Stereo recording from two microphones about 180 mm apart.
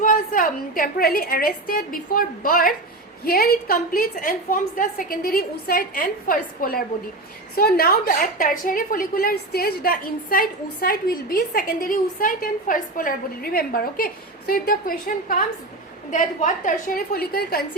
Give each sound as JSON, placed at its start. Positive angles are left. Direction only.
{"t": 0.0, "sound": "a woman's voice", "side_deg": 45}